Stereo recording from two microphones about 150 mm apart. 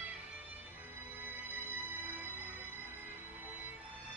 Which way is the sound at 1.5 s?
10° right (ahead or behind).